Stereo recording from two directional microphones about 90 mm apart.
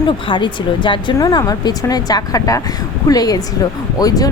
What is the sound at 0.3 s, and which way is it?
Speech, 60° left (ahead or behind).